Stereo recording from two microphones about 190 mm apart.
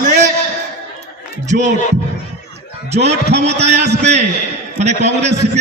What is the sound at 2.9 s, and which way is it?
A man's voice, 35° right (ahead or behind).